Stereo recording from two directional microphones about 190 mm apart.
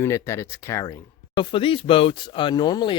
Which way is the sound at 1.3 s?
30° left (ahead or behind).